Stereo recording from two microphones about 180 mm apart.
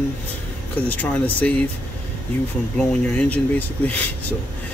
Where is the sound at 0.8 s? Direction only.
10° left (ahead or behind).